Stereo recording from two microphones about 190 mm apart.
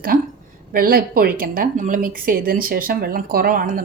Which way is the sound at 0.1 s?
45° right (ahead or behind).